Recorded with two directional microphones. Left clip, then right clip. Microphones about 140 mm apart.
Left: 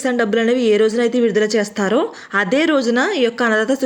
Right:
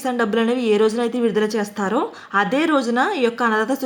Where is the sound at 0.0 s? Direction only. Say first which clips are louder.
Left 3 dB; 20° left (ahead or behind).